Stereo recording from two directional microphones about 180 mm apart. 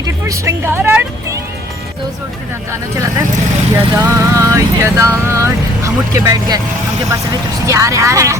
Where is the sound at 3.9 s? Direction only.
15° right (ahead or behind).